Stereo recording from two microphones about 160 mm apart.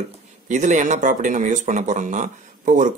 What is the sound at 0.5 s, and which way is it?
Speech, 50° right (ahead or behind).